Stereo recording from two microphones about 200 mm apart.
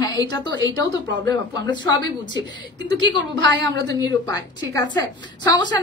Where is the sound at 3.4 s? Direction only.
65° right (ahead or behind).